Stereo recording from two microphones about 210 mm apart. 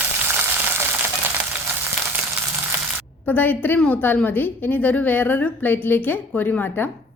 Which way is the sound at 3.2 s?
10° left (ahead or behind).